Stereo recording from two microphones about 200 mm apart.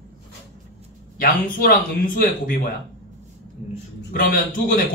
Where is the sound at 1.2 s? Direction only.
50° left (ahead or behind).